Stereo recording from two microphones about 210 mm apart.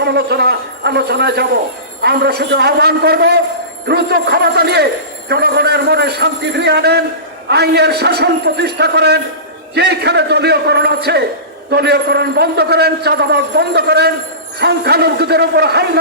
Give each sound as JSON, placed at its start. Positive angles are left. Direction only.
{"t": 0.0, "sound": "a man's voice", "side_deg": -50}